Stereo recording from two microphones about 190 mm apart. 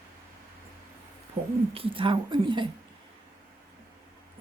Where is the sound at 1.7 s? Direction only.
30° right (ahead or behind).